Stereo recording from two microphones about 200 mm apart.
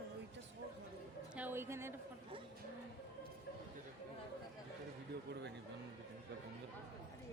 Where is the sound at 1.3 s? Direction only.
10° right (ahead or behind).